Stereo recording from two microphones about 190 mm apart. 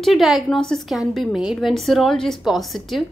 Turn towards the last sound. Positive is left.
turn(degrees=0)  # may be behind; listen again after turning